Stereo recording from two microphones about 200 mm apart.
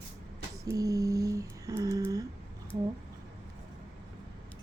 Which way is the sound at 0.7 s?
15° right (ahead or behind).